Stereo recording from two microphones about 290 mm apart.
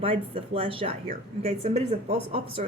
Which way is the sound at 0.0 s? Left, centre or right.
Centre.